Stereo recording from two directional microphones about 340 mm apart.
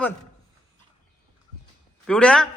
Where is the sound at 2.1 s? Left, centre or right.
Centre.